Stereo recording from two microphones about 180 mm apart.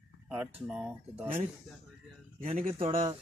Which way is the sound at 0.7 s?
5° right (ahead or behind).